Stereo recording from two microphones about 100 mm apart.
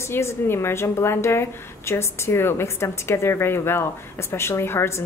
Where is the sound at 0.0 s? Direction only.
25° left (ahead or behind).